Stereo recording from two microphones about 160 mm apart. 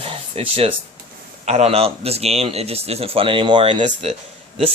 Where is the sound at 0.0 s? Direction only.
35° right (ahead or behind).